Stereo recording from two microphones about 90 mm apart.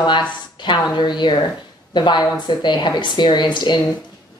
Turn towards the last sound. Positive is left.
turn(degrees=60)  # may be behind; listen again after turning